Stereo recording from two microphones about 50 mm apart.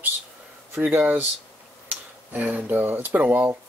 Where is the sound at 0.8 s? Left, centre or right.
Right.